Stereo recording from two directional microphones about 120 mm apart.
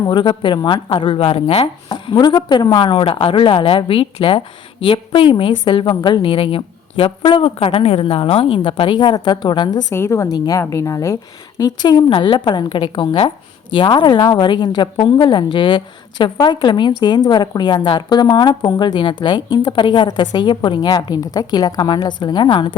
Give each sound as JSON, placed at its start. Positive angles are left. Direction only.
{"t": 0.0, "sound": "a woman's voice", "side_deg": 40}
{"t": 9.9, "sound": "a woman's voice", "side_deg": 25}